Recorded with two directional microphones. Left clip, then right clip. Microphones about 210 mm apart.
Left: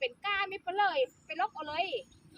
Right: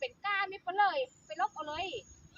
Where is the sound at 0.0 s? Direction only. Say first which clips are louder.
Left 1 dB; 50° left (ahead or behind).